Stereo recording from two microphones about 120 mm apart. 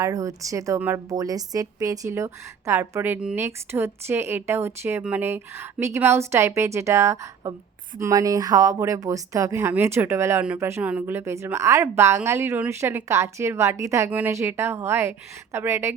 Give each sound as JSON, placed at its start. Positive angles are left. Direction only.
{"t": 0.0, "sound": "a woman's voice", "side_deg": -25}
{"t": 14.1, "sound": "a woman's voice", "side_deg": -15}